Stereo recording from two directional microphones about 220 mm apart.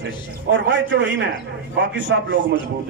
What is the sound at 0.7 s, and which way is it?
A man's voice, 55° right (ahead or behind).